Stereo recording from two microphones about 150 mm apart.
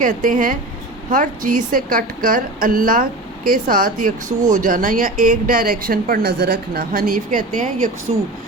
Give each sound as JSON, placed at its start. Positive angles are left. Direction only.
{"t": 0.0, "sound": "a woman's voice", "side_deg": -65}